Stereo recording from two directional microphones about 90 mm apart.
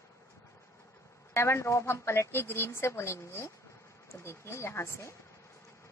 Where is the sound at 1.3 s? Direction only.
30° left (ahead or behind).